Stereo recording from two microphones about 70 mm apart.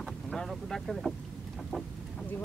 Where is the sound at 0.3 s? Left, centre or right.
Centre.